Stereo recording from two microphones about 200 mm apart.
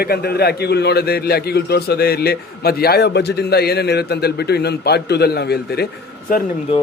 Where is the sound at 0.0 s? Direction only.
50° left (ahead or behind).